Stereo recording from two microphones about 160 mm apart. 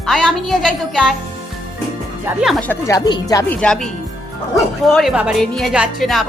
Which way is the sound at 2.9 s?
25° left (ahead or behind).